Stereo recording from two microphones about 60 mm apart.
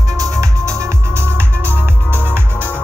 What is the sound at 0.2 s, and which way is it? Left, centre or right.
Music, right.